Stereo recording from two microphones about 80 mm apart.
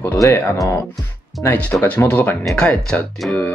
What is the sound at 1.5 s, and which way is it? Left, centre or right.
Speech, centre.